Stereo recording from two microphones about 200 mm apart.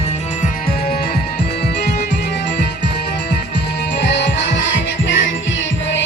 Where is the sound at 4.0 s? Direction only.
60° left (ahead or behind).